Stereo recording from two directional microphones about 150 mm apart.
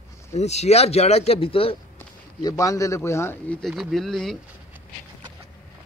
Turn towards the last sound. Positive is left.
turn(degrees=0)  # may be behind; listen again after turning